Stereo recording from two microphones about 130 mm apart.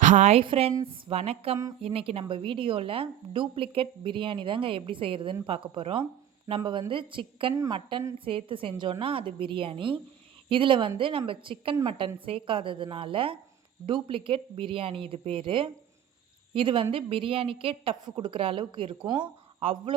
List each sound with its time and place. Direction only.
0.0 s a woman's voice: 65° right (ahead or behind)
0.4 s a woman's voice: 45° right (ahead or behind)
7.5 s a woman's voice: 25° right (ahead or behind)
8.2 s a woman's voice: 40° right (ahead or behind)